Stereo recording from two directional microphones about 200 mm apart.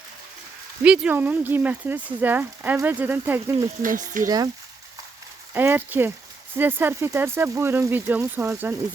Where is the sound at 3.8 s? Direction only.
40° right (ahead or behind).